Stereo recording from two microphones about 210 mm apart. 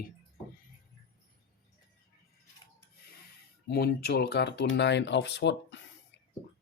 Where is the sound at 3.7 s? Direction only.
50° left (ahead or behind).